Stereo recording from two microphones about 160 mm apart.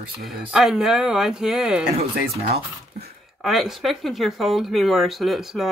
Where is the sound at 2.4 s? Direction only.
80° right.